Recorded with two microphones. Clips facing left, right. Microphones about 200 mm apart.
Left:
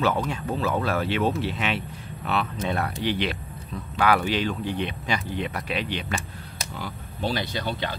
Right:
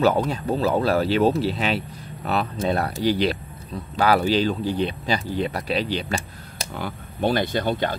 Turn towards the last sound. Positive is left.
turn(degrees=-50)  # may be behind; listen again after turning